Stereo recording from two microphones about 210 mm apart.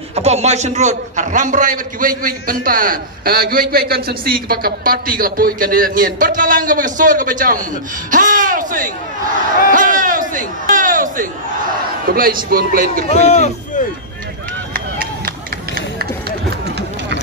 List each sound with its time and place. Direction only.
0.1 s a man's voice: 30° right (ahead or behind)
8.1 s a sound: 40° right (ahead or behind)
12.1 s a man's voice: 45° right (ahead or behind)
13.1 s a man's voice: 30° left (ahead or behind)
15.2 s run: 45° right (ahead or behind)